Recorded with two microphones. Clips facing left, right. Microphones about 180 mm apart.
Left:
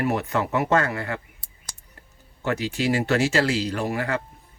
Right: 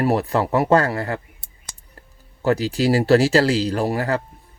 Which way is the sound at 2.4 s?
35° right (ahead or behind).